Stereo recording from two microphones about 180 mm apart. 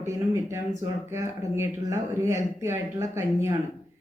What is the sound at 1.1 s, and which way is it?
Speech, 15° right (ahead or behind).